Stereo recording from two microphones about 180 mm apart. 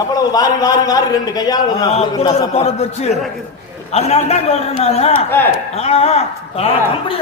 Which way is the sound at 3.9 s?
35° left (ahead or behind).